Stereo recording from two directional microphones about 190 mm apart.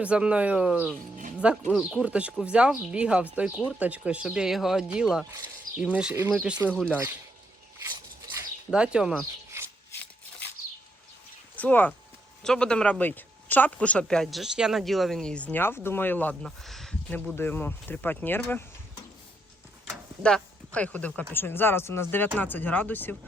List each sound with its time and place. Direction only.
0.0 s speech: 5° right (ahead or behind)
6.7 s speech: 5° left (ahead or behind)
8.7 s speech: 5° right (ahead or behind)
11.5 s speech: 10° left (ahead or behind)
19.9 s speech: 5° left (ahead or behind)